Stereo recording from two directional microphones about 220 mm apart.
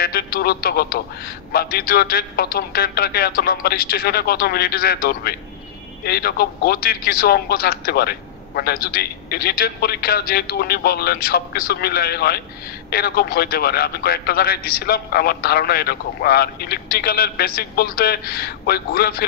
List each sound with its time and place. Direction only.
0.0 s speech: 45° left (ahead or behind)